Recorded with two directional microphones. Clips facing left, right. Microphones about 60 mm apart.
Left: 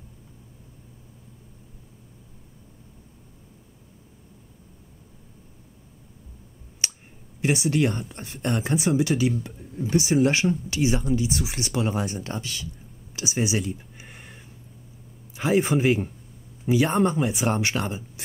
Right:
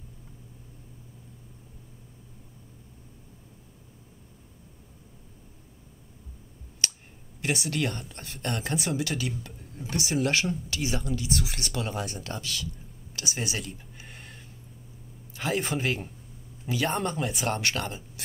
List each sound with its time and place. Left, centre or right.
6.8 s finger snapping: centre
7.4 s speech: left
13.1 s a sound: left
15.3 s speech: centre